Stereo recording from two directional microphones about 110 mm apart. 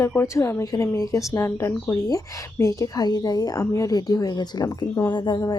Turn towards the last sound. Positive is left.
turn(degrees=45)  # may be behind; listen again after turning